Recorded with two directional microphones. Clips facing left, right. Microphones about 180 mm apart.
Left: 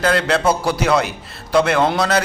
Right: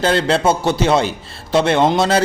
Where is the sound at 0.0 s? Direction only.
30° right (ahead or behind).